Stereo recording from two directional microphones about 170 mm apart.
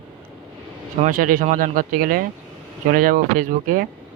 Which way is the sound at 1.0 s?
55° right (ahead or behind).